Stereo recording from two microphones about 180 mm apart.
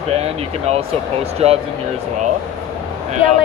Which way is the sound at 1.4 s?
35° right (ahead or behind).